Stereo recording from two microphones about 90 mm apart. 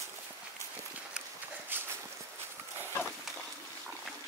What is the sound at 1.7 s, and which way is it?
Walk, 25° right (ahead or behind).